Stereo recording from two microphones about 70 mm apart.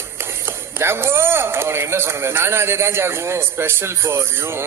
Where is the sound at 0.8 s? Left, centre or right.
Right.